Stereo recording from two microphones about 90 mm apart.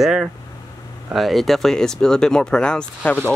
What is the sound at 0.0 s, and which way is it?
Speech, 5° right (ahead or behind).